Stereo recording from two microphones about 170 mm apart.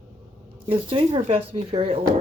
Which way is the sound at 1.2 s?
40° right (ahead or behind).